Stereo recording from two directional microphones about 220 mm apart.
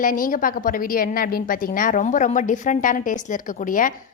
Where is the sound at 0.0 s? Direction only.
40° left (ahead or behind).